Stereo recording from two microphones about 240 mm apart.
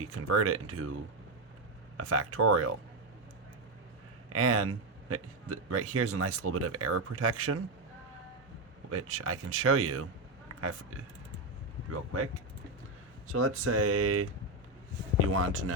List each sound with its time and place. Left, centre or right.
0.0 s speech: right
2.0 s speech: right
4.3 s speech: right
8.9 s speech: right
11.9 s speech: right
13.3 s speech: right
15.3 s speech: right